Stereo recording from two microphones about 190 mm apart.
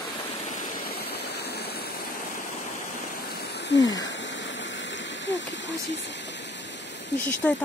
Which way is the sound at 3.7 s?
65° left (ahead or behind).